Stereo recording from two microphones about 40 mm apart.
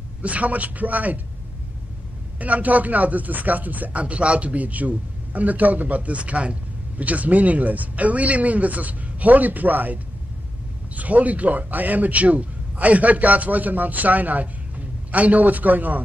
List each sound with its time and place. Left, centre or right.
0.2 s speech: right
2.4 s speech: right
11.0 s a man's voice: right